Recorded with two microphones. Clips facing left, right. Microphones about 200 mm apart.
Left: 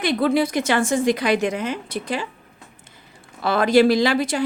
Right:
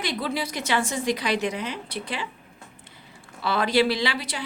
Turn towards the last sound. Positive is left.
turn(degrees=50)  # may be behind; listen again after turning